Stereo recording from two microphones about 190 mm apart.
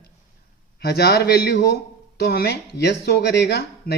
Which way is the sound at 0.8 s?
55° left (ahead or behind).